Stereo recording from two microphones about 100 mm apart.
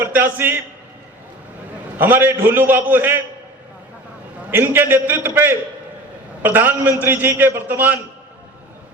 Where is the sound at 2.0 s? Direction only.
20° right (ahead or behind).